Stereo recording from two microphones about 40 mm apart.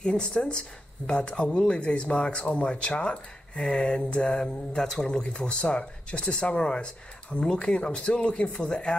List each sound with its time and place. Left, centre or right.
0.0 s speech: left
5.2 s speech: left